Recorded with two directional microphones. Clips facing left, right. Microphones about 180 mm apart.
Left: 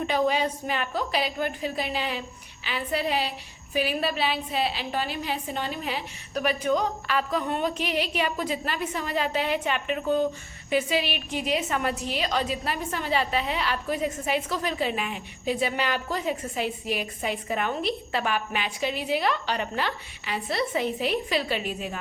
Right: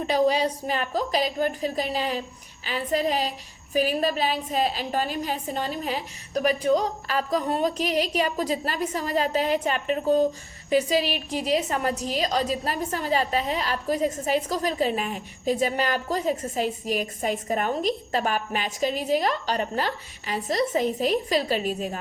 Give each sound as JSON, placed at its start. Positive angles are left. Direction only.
{"t": 0.1, "sound": "a woman's voice", "side_deg": -35}